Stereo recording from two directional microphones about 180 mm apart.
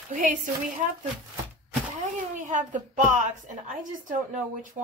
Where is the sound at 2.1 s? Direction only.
45° right (ahead or behind).